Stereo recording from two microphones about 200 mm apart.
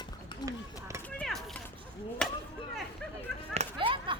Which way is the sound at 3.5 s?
30° right (ahead or behind).